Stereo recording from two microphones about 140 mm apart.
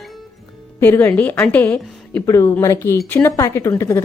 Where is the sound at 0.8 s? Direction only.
15° left (ahead or behind).